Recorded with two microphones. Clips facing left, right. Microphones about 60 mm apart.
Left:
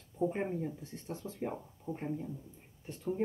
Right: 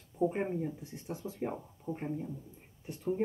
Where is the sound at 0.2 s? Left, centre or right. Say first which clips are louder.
Right 2 dB; centre.